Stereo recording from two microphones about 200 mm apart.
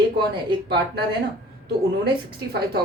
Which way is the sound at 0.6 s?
55° right (ahead or behind).